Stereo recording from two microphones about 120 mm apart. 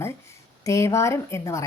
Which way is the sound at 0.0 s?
25° left (ahead or behind).